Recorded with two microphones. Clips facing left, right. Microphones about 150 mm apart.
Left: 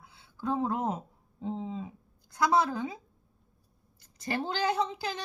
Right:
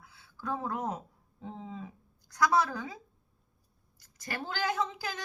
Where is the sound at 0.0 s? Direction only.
25° left (ahead or behind).